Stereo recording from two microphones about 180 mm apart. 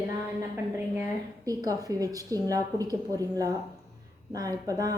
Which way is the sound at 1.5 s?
20° right (ahead or behind).